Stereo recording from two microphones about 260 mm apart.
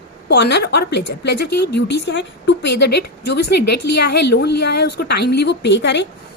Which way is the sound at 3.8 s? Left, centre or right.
Left.